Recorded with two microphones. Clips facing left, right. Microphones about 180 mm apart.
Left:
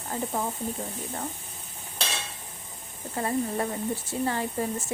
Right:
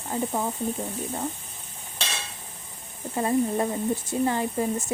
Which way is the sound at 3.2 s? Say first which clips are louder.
Right 4 dB; 20° right (ahead or behind).